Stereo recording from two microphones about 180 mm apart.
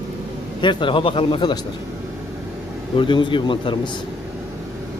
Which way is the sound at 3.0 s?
25° left (ahead or behind).